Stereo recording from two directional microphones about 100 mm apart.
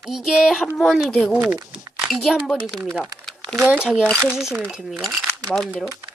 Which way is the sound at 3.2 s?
Centre (ahead or behind).